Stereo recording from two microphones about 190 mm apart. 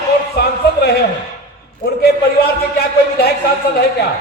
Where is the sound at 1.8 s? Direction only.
55° left (ahead or behind).